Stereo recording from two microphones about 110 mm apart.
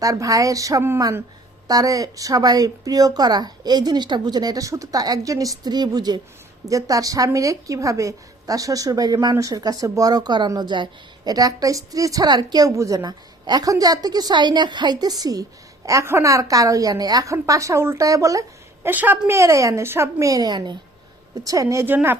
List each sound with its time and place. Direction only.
0.0 s a woman's voice: 30° right (ahead or behind)
18.9 s a woman's voice: 20° right (ahead or behind)